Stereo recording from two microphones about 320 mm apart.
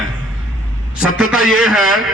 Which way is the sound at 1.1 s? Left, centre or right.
Centre.